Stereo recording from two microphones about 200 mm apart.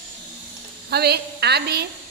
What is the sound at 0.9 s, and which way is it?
Speech, 55° right (ahead or behind).